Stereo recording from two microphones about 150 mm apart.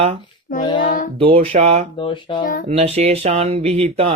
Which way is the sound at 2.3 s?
35° left (ahead or behind).